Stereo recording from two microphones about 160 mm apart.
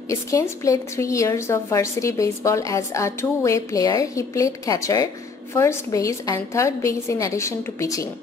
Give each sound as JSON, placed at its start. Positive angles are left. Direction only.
{"t": 0.1, "sound": "a woman's voice", "side_deg": 20}